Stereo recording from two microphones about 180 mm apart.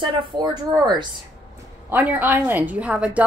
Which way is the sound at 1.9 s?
10° right (ahead or behind).